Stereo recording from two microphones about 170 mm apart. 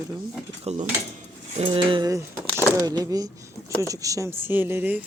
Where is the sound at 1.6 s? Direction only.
30° right (ahead or behind).